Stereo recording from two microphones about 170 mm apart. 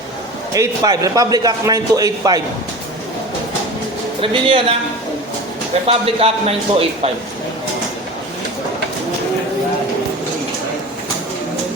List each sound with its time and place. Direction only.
0.5 s a man's voice: 20° right (ahead or behind)
4.2 s a man's voice: 30° right (ahead or behind)
5.9 s a man's voice: 35° right (ahead or behind)